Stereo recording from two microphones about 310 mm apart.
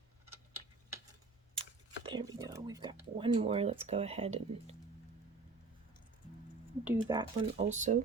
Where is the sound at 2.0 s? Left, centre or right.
Centre.